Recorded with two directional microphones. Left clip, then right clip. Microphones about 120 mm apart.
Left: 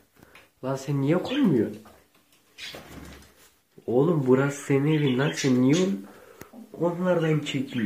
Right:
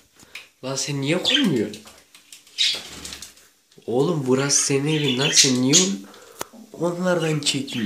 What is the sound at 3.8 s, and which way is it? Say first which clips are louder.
Speech: right 1 dB; 25° right (ahead or behind).